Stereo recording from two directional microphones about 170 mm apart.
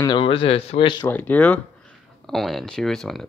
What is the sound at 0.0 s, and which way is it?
Speech, 30° left (ahead or behind).